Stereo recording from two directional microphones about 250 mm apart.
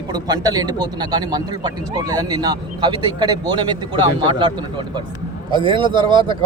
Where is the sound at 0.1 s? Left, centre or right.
Centre.